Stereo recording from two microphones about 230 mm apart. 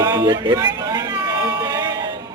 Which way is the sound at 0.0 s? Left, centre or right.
Centre.